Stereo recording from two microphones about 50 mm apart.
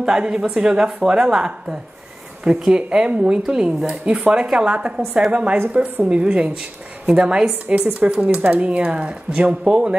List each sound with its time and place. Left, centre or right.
0.0 s a woman's voice: centre